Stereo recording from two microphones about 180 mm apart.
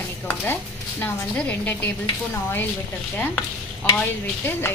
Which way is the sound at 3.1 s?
10° left (ahead or behind).